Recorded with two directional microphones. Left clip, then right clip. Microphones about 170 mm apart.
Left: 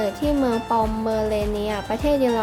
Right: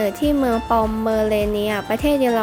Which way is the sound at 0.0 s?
25° right (ahead or behind).